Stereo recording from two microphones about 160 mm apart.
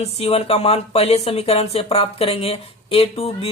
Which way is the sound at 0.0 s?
40° left (ahead or behind).